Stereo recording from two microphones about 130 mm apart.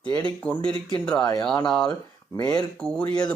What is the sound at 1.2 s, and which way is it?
Speech, 30° left (ahead or behind).